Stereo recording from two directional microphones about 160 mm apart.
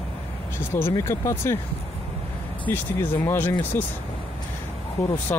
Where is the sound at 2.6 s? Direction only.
15° left (ahead or behind).